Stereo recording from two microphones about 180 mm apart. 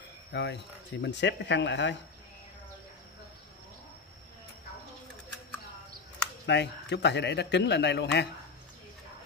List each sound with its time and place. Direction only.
0.3 s a man's voice: 75° left (ahead or behind)
6.4 s a man's voice: 70° left (ahead or behind)